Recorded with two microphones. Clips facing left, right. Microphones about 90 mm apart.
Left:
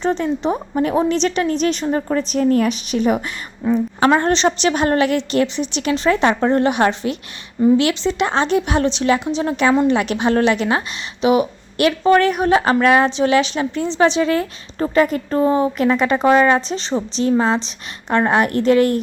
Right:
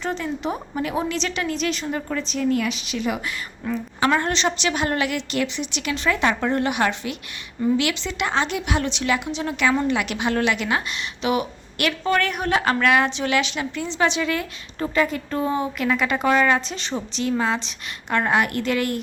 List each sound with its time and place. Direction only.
0.0 s a woman's voice: 30° left (ahead or behind)
3.6 s a woman's voice: 15° left (ahead or behind)
4.0 s a woman's voice: 30° left (ahead or behind)